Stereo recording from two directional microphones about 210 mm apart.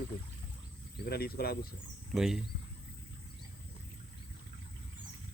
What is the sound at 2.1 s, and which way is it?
Speech, centre (ahead or behind).